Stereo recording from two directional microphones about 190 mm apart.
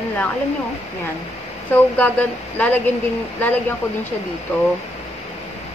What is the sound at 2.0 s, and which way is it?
Speech, 10° left (ahead or behind).